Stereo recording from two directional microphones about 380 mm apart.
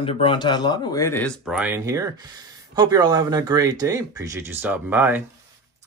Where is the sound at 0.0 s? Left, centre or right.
Centre.